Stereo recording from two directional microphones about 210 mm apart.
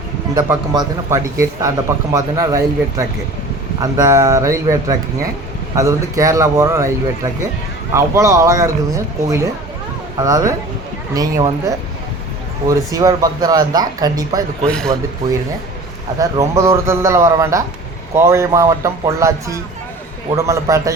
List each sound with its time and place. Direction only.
0.3 s speech: 15° right (ahead or behind)
3.8 s speech: 15° right (ahead or behind)
7.9 s speech: 15° right (ahead or behind)
14.7 s speech: 5° left (ahead or behind)
16.1 s speech: 15° right (ahead or behind)